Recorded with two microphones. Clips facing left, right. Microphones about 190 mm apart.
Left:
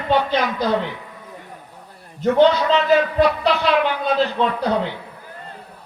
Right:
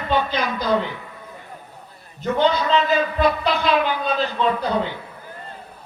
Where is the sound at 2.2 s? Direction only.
75° left (ahead or behind).